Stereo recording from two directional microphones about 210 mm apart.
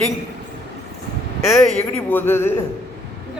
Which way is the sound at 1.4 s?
Centre (ahead or behind).